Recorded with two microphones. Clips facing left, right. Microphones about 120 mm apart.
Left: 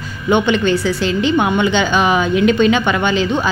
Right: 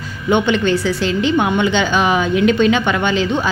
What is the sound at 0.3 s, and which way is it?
Speech, 15° left (ahead or behind).